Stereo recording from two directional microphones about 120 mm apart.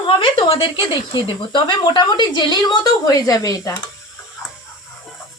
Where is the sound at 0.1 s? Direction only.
50° left (ahead or behind); by 3.8 s 30° left (ahead or behind).